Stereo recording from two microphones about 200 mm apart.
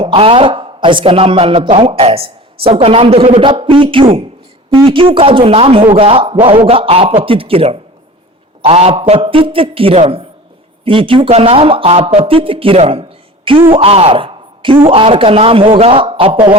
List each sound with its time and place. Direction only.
0.0 s speech: 25° right (ahead or behind)